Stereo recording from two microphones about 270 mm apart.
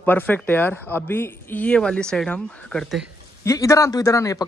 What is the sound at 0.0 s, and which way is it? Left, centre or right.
Speech, centre.